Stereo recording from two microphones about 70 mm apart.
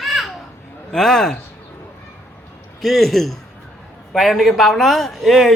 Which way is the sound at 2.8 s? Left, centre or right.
Centre.